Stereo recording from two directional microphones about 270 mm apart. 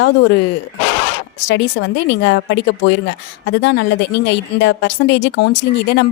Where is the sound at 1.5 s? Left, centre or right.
Left.